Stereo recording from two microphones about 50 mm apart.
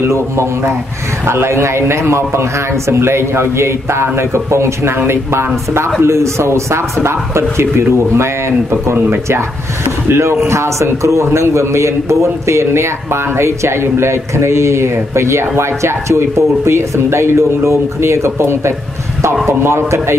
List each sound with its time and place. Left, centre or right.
0.0 s a man's voice: right
6.0 s a man's voice: right